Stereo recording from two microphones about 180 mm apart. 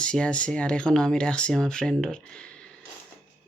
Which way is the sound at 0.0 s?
5° left (ahead or behind).